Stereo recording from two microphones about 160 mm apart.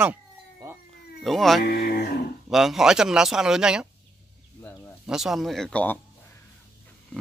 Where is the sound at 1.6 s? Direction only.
90° left.